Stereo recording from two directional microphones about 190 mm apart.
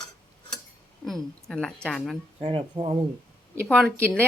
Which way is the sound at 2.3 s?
30° right (ahead or behind).